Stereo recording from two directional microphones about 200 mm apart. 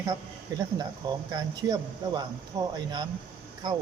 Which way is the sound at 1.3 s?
20° right (ahead or behind).